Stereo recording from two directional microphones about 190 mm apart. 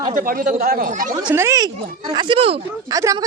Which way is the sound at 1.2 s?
15° right (ahead or behind).